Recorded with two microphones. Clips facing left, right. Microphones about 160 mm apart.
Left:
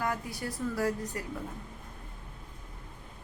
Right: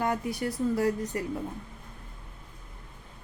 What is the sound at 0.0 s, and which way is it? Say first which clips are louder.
A woman's voice: right 5 dB; 25° right (ahead or behind).